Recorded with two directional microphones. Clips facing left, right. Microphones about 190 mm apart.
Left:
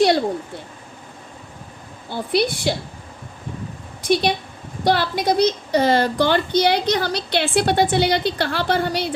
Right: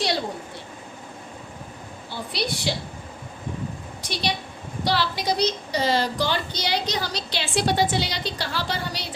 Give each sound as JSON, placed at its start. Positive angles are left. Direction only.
{"t": 2.0, "sound": "a woman's voice", "side_deg": 50}
{"t": 4.0, "sound": "a woman's voice", "side_deg": 55}